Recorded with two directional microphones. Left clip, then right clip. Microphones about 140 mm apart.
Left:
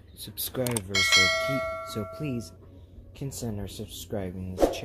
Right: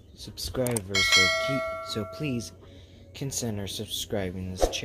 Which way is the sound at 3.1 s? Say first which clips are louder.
Right 3 dB; 20° right (ahead or behind).